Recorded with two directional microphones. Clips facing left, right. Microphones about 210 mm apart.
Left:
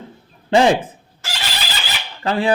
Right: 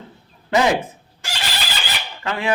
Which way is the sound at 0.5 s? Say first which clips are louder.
Left 4 dB; 30° left (ahead or behind).